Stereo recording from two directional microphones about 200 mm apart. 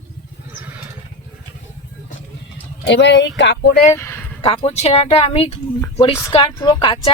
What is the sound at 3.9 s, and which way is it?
Speech, 15° left (ahead or behind).